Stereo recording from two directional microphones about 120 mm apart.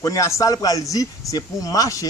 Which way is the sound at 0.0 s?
25° left (ahead or behind).